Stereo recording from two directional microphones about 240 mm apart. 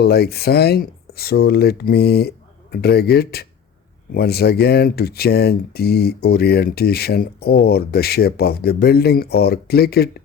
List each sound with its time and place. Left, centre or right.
0.0 s speech: left